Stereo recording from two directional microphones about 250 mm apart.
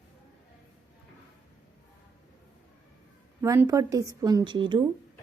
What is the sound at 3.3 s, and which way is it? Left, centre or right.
A woman's voice, centre.